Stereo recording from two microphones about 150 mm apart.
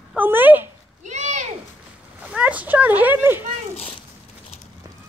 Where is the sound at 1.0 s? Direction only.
55° right (ahead or behind).